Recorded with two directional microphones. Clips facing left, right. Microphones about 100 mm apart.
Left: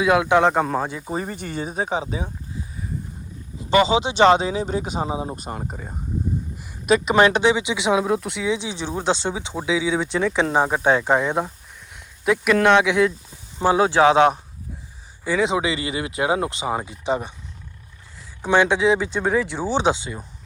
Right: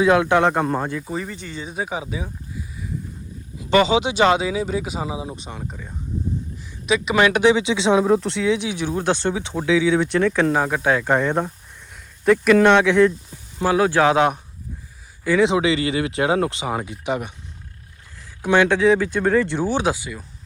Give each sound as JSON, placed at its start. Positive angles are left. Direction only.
{"t": 0.0, "sound": "speech", "side_deg": 10}
{"t": 0.6, "sound": "speech", "side_deg": 0}
{"t": 0.9, "sound": "speech", "side_deg": 15}
{"t": 1.1, "sound": "speech", "side_deg": 35}
{"t": 1.4, "sound": "speech", "side_deg": 50}
{"t": 1.7, "sound": "speech", "side_deg": 30}
{"t": 3.7, "sound": "speech", "side_deg": 20}
{"t": 4.2, "sound": "speech", "side_deg": 35}
{"t": 7.4, "sound": "speech", "side_deg": 15}
{"t": 13.6, "sound": "speech", "side_deg": 25}
{"t": 18.4, "sound": "speech", "side_deg": 15}